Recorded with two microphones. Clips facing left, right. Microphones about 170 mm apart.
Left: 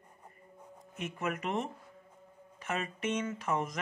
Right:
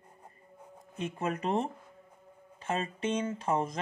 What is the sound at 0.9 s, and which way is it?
Speech, 30° right (ahead or behind).